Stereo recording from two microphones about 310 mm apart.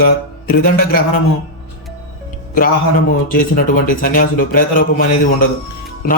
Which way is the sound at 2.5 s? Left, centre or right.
Left.